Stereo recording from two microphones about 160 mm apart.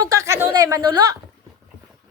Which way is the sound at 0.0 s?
20° right (ahead or behind).